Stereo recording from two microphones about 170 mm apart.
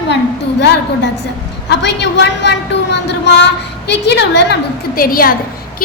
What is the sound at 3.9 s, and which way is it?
Speech, 80° left.